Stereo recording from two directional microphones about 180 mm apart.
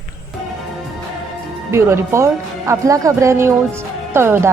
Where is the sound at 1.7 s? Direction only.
15° right (ahead or behind).